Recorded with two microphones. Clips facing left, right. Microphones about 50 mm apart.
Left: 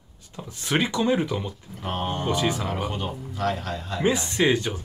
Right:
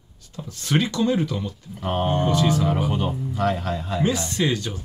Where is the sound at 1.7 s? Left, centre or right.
Centre.